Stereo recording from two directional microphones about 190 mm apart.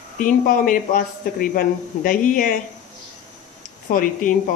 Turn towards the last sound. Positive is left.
turn(degrees=45)  # may be behind; listen again after turning